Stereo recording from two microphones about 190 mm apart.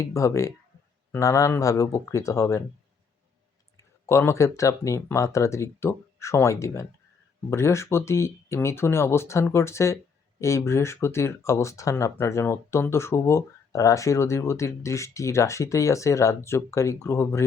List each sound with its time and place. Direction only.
0.0 s speech: 15° left (ahead or behind)
3.8 s speech: 15° left (ahead or behind)